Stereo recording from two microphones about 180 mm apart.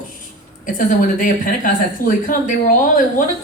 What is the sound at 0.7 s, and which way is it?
Speech, 50° left (ahead or behind).